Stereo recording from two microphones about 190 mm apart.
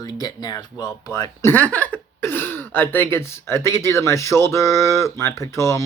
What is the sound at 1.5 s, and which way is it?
Speech, 5° left (ahead or behind).